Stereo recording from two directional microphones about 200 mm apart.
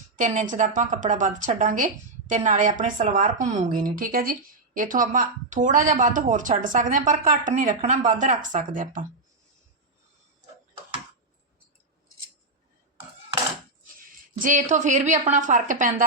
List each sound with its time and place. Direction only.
0.2 s speech: 40° right (ahead or behind)
14.3 s speech: 40° right (ahead or behind)